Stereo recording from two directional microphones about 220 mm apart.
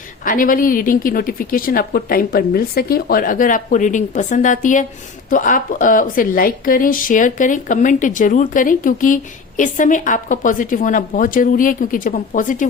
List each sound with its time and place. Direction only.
0.3 s speech: 40° left (ahead or behind)